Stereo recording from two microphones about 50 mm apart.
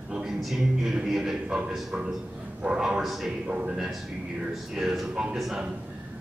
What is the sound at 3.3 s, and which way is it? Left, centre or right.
Music, right.